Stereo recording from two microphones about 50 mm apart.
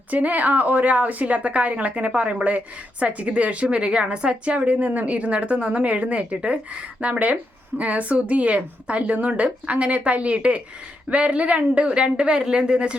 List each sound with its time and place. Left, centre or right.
0.1 s a woman's voice: right